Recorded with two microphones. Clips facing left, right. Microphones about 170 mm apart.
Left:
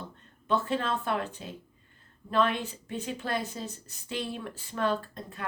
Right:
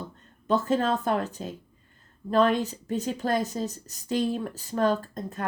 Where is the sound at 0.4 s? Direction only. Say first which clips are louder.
Right 5 dB; 40° right (ahead or behind).